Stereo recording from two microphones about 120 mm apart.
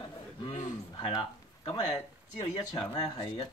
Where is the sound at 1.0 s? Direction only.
40° left (ahead or behind).